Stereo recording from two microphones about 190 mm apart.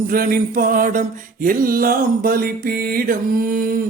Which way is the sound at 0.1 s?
50° right (ahead or behind).